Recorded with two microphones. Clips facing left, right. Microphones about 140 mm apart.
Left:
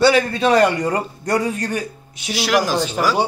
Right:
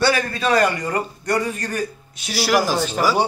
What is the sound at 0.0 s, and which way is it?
A man's voice, 25° left (ahead or behind).